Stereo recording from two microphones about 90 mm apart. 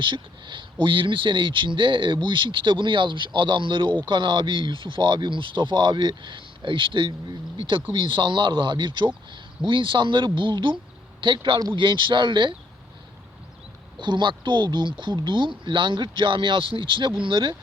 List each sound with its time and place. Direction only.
0.0 s speech: 65° right (ahead or behind)
14.0 s speech: 60° right (ahead or behind)